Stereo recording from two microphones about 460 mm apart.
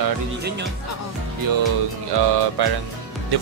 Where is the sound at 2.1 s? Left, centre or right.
Right.